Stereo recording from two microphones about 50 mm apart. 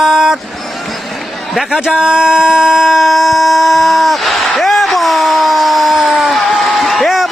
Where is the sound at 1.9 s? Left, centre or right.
Centre.